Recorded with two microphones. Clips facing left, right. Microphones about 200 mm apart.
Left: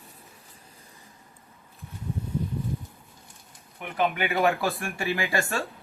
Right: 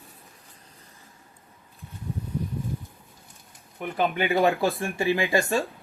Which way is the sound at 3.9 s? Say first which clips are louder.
Right 2 dB; 30° right (ahead or behind).